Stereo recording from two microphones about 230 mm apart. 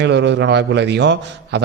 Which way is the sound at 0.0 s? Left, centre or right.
Right.